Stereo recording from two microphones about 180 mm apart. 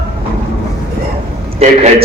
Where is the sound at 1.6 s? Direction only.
35° right (ahead or behind).